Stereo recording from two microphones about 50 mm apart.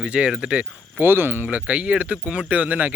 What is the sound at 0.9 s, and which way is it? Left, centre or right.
Speech, right.